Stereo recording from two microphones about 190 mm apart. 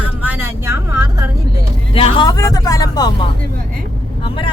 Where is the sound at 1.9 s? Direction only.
25° left (ahead or behind).